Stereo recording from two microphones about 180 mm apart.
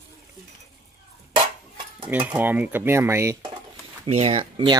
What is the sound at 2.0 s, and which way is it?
Speech, 10° right (ahead or behind).